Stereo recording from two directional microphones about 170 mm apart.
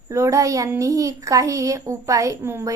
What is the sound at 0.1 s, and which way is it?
A woman's voice, 15° right (ahead or behind).